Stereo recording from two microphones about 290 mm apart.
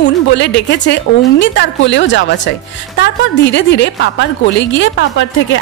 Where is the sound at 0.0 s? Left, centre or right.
Left.